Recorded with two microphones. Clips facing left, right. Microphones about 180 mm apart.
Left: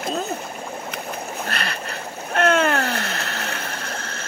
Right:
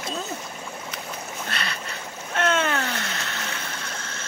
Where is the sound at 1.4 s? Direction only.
60° left (ahead or behind).